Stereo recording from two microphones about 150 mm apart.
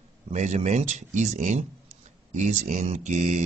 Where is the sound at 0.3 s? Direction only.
50° right (ahead or behind).